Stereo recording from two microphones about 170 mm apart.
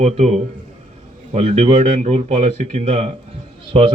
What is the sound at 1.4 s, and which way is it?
A man's voice, 40° right (ahead or behind).